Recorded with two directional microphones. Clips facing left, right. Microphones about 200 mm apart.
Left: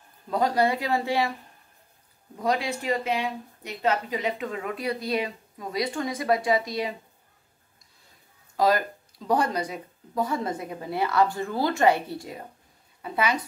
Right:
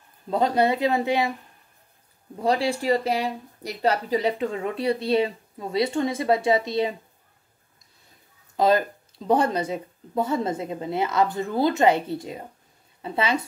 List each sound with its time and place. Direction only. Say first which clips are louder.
0.3 s speech: right 2 dB; 25° right (ahead or behind)
2.3 s speech: right 4 dB; 30° right (ahead or behind)
8.5 s speech: right 3 dB; 25° right (ahead or behind)